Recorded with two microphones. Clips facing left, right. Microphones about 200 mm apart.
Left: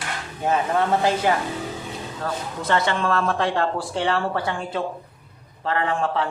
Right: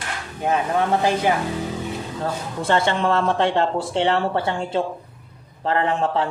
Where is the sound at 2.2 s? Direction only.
25° right (ahead or behind).